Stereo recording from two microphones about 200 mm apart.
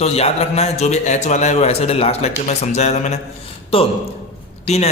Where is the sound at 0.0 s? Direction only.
30° left (ahead or behind).